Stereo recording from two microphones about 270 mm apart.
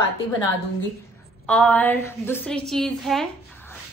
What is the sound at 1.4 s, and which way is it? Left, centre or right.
A woman's voice, centre.